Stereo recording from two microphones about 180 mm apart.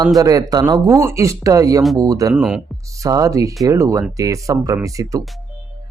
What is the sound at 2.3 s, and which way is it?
Speech, 5° right (ahead or behind).